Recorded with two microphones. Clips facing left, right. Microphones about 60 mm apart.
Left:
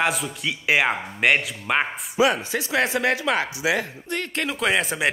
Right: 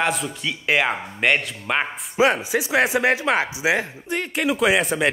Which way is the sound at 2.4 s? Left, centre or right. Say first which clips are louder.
Right 3 dB; centre.